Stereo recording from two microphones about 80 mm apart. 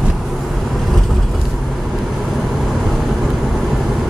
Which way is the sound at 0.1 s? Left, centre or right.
Centre.